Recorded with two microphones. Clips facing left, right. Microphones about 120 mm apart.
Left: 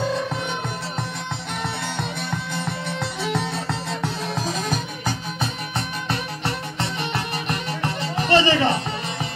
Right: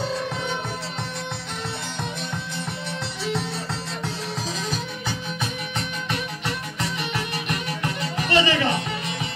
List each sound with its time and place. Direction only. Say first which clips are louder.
4.0 s music: left 4 dB; 55° left (ahead or behind)
6.0 s music: left 2 dB; 30° left (ahead or behind)